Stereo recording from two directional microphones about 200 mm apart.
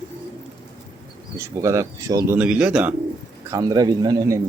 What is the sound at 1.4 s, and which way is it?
Speech, 15° right (ahead or behind).